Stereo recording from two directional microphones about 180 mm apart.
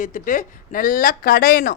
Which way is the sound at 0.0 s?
45° left (ahead or behind).